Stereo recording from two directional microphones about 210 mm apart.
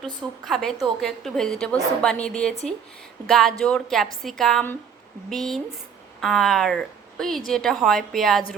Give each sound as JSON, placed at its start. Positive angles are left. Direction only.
{"t": 0.0, "sound": "a woman's voice", "side_deg": 0}